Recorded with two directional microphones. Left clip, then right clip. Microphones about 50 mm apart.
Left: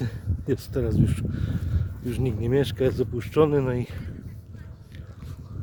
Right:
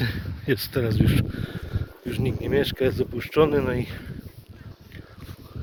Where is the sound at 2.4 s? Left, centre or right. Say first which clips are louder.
Right 1 dB; left.